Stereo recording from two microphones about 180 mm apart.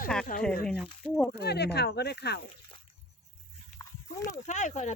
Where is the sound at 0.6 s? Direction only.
5° left (ahead or behind).